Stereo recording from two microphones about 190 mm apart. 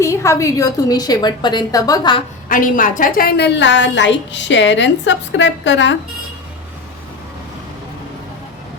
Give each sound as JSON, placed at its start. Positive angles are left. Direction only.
{"t": 0.0, "sound": "a woman's voice", "side_deg": 15}
{"t": 2.5, "sound": "a woman's voice", "side_deg": 45}